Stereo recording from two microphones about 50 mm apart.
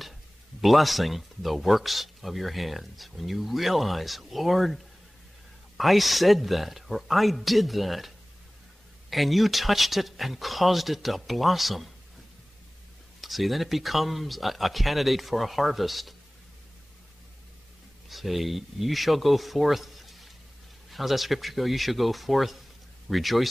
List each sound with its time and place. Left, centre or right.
0.6 s speech: centre
9.1 s speech: centre
13.2 s speech: centre
18.0 s speech: centre